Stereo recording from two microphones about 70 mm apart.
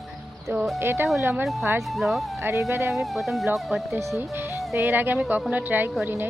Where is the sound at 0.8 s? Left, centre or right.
Right.